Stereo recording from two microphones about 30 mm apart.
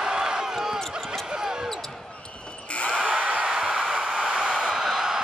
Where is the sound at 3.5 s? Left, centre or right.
Right.